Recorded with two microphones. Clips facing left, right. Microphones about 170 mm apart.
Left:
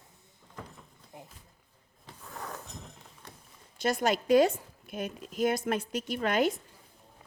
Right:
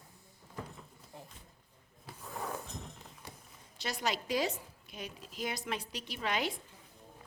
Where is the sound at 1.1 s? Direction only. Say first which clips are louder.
Left 2 dB; 15° left (ahead or behind).